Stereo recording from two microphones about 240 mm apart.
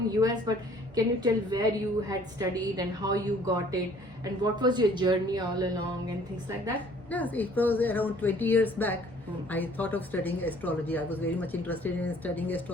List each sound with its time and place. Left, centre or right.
0.1 s a woman's voice: centre
7.1 s speech: centre